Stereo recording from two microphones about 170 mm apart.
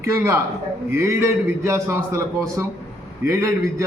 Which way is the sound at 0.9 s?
15° right (ahead or behind).